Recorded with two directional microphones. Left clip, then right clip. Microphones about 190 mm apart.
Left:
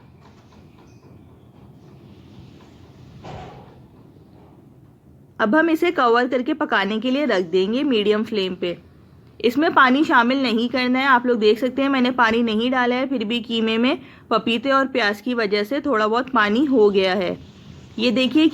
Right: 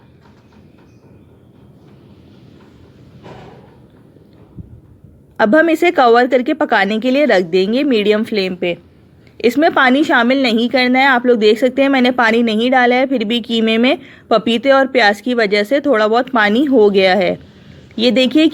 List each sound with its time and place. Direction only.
5.4 s a woman's voice: 20° right (ahead or behind)